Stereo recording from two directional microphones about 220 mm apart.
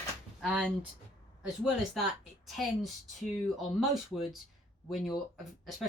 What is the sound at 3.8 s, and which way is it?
Speech, centre (ahead or behind).